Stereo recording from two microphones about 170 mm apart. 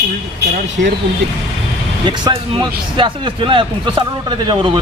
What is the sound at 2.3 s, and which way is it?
Speech, 30° right (ahead or behind).